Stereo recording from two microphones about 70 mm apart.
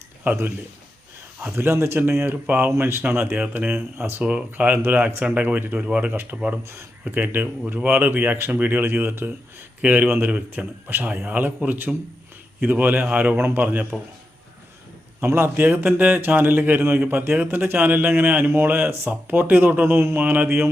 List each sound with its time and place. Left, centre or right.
1.5 s speech: right
4.2 s a man's voice: centre
13.3 s speech: right
13.6 s a man's voice: right
15.2 s a man's voice: right